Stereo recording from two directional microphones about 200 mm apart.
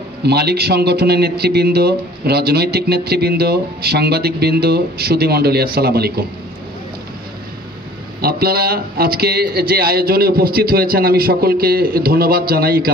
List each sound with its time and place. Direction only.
0.2 s a man's voice: 55° right (ahead or behind)
8.2 s a man's voice: 50° right (ahead or behind)